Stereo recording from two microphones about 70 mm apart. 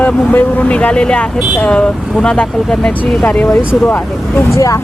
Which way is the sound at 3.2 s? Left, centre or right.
Left.